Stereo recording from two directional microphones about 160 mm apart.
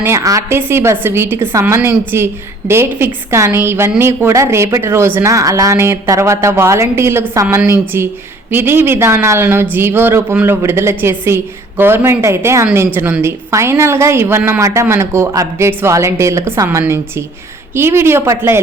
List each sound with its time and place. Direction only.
0.0 s a woman's voice: 20° right (ahead or behind)